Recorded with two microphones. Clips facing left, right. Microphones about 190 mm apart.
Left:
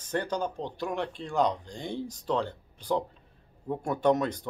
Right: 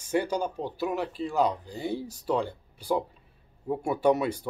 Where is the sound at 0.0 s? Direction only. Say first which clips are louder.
Right 3 dB; 10° right (ahead or behind).